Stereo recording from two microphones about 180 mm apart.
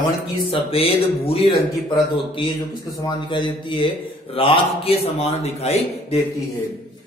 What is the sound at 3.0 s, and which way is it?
A man's voice, 25° left (ahead or behind).